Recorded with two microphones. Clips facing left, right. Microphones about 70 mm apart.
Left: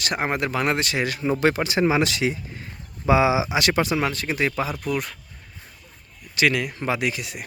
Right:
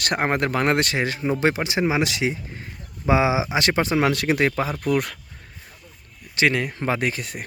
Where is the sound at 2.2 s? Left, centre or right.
Right.